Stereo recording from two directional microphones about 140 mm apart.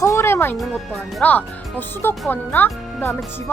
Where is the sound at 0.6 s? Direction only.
Centre (ahead or behind).